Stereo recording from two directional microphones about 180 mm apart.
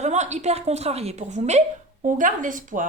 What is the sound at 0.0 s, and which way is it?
Speech, 40° right (ahead or behind).